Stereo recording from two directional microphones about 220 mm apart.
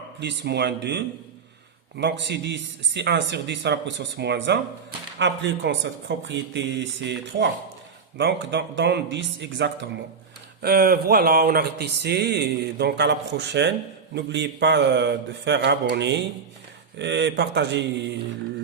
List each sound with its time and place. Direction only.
0.2 s speech: 50° right (ahead or behind)